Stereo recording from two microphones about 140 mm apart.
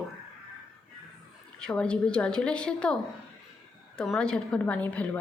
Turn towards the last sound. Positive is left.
turn(degrees=10)  # may be behind; listen again after turning